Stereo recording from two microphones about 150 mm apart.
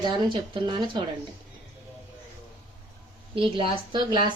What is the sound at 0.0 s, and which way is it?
Speech, 30° right (ahead or behind).